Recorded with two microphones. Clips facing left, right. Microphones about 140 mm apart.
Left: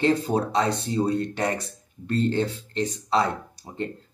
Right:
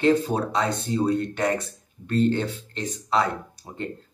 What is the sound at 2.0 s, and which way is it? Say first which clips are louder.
Speech: right 1 dB; 30° left (ahead or behind).